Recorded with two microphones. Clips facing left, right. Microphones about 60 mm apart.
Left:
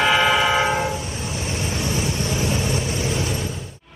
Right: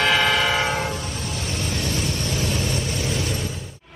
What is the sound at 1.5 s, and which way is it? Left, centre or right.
Vehicle, left.